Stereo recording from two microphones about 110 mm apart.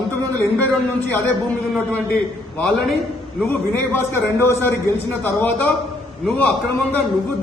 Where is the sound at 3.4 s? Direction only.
20° left (ahead or behind).